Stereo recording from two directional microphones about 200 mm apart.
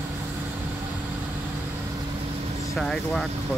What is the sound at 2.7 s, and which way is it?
Speech, centre (ahead or behind).